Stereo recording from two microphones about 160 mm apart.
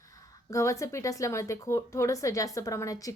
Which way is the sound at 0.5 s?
20° left (ahead or behind).